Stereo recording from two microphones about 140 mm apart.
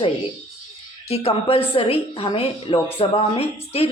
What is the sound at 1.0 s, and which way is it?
A woman's voice, 45° left (ahead or behind).